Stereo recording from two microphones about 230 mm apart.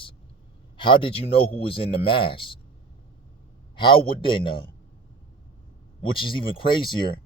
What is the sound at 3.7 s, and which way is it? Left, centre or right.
Speech, left.